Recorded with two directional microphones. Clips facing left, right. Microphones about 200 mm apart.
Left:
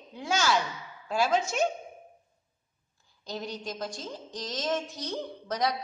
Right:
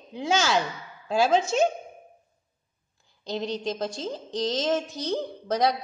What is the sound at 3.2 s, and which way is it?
A woman's voice, 20° right (ahead or behind).